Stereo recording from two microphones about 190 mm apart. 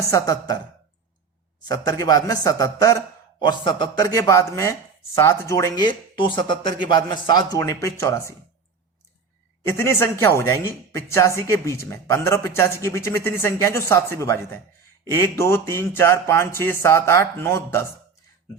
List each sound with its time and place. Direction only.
0.0 s speech: 20° left (ahead or behind)
1.6 s speech: 20° left (ahead or behind)
9.6 s speech: 10° left (ahead or behind)